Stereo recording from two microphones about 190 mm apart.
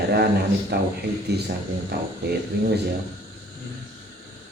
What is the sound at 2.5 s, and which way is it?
Speech, 60° right (ahead or behind).